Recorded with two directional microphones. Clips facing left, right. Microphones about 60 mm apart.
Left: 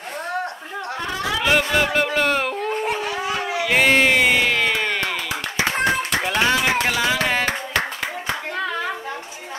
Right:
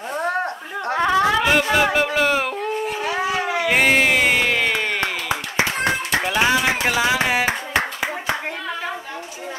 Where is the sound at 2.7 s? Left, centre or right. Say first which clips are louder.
Left 1 dB; left.